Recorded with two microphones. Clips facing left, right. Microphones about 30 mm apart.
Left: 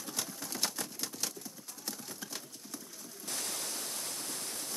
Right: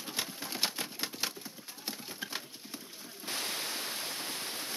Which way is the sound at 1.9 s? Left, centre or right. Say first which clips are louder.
Right 3 dB; right.